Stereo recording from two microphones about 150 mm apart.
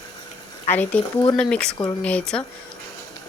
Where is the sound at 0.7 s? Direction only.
10° left (ahead or behind).